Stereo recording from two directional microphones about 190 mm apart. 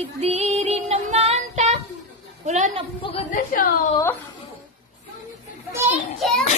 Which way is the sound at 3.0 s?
30° left (ahead or behind).